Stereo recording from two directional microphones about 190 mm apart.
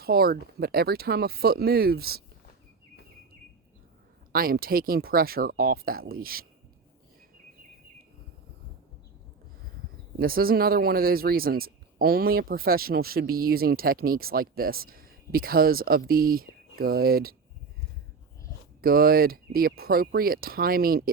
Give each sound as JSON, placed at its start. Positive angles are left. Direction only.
{"t": 0.0, "sound": "speech", "side_deg": -55}
{"t": 4.3, "sound": "speech", "side_deg": -50}
{"t": 10.2, "sound": "speech", "side_deg": -50}
{"t": 18.8, "sound": "speech", "side_deg": -50}